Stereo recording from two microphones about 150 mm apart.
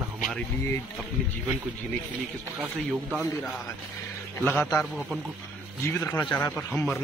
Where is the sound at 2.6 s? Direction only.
10° right (ahead or behind).